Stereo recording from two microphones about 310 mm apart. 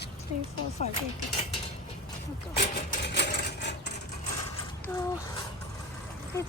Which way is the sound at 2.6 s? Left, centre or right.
Left.